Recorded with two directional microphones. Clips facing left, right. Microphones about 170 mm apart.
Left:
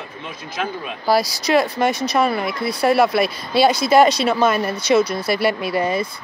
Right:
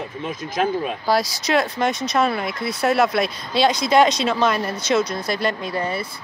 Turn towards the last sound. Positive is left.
turn(degrees=10)  # may be behind; listen again after turning